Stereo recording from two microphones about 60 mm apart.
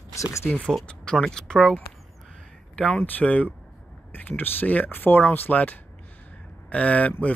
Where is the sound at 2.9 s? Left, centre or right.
Left.